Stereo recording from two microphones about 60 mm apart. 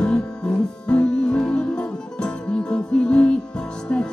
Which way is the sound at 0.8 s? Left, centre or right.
Centre.